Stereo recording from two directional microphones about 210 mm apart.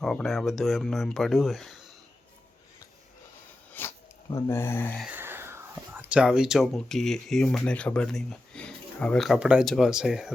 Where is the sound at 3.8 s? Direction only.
10° left (ahead or behind).